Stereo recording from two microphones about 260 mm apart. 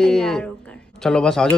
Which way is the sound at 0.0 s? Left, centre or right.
Centre.